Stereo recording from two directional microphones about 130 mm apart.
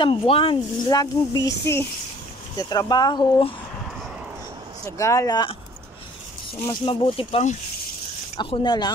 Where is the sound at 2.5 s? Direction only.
30° left (ahead or behind).